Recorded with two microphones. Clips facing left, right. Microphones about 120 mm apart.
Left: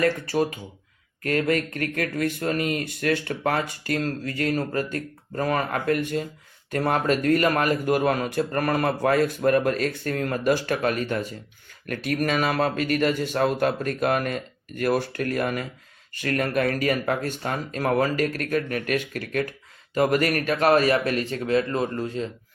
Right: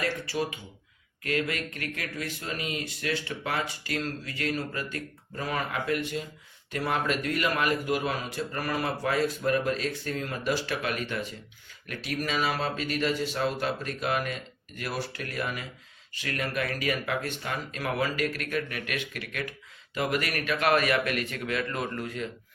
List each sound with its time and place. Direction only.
0.0 s speech: 45° left (ahead or behind); by 22.3 s 30° left (ahead or behind)